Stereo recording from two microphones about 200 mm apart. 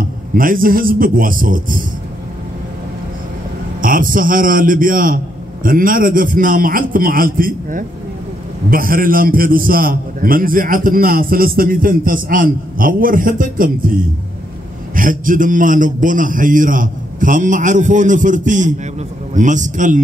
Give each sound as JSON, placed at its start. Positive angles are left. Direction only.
{"t": 0.3, "sound": "a man's voice", "side_deg": -45}
{"t": 3.8, "sound": "a man's voice", "side_deg": -45}
{"t": 15.0, "sound": "a man's voice", "side_deg": -40}